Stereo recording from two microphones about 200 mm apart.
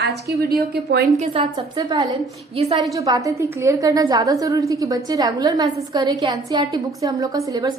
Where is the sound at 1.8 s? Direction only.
20° right (ahead or behind).